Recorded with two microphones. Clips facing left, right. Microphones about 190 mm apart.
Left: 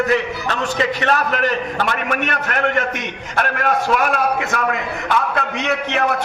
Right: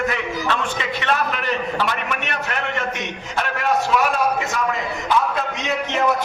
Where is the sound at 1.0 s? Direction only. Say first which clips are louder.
Left 1 dB; 45° left (ahead or behind).